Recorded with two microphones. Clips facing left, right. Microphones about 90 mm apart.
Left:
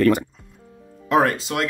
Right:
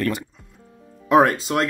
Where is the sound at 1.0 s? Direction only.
20° right (ahead or behind).